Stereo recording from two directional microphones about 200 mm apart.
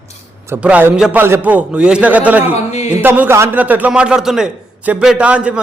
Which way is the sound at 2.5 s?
30° left (ahead or behind).